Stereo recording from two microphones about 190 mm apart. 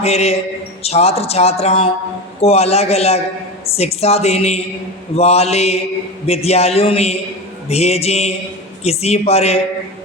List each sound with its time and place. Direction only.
0.0 s speech: 35° left (ahead or behind)